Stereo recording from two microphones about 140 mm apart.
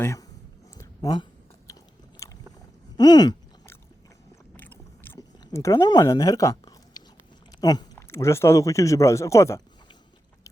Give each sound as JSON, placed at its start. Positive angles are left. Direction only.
{"t": 0.0, "sound": "speech", "side_deg": 20}
{"t": 1.1, "sound": "a sound", "side_deg": 35}
{"t": 2.2, "sound": "boat", "side_deg": 20}
{"t": 3.0, "sound": "speech", "side_deg": 30}
{"t": 4.5, "sound": "boat", "side_deg": 15}
{"t": 5.5, "sound": "speech", "side_deg": 20}
{"t": 7.9, "sound": "speech", "side_deg": 20}